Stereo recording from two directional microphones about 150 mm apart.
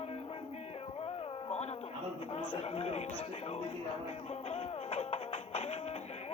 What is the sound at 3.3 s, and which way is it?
Music, 45° left (ahead or behind).